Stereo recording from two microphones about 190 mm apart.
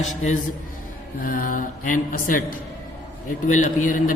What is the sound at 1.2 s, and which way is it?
Speech, 45° left (ahead or behind).